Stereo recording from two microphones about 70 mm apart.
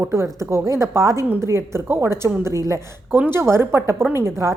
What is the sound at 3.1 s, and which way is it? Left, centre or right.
Speech, right.